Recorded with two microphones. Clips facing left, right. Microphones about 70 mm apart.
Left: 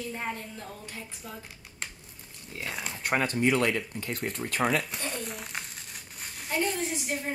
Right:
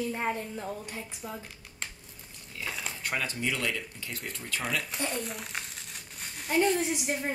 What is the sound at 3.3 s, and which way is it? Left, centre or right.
Speech, left.